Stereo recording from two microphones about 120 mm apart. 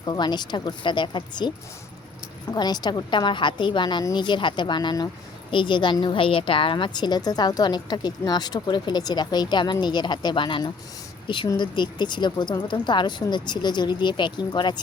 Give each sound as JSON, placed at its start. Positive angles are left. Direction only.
{"t": 0.0, "sound": "a woman's voice", "side_deg": 35}
{"t": 2.6, "sound": "a woman's voice", "side_deg": 35}